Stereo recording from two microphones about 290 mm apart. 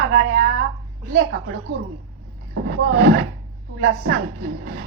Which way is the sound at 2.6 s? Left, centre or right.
Right.